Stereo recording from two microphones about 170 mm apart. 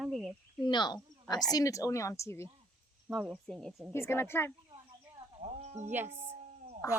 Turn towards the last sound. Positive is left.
turn(degrees=-40)  # may be behind; listen again after turning